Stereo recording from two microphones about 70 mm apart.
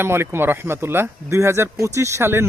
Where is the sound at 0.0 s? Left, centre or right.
Right.